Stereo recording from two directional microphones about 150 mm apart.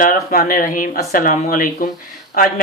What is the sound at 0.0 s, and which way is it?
Speech, 70° left (ahead or behind).